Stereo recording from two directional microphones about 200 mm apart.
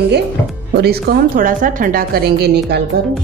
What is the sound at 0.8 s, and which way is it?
A woman's voice, 50° right (ahead or behind).